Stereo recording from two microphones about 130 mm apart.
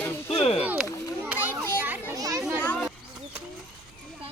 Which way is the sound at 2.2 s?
25° right (ahead or behind).